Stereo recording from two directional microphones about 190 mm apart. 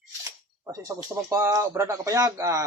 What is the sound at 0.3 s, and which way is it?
Speech, 15° right (ahead or behind).